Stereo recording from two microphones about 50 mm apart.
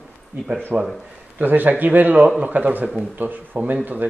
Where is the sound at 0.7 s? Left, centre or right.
Centre.